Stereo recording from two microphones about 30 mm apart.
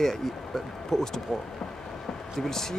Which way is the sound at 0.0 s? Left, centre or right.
Centre.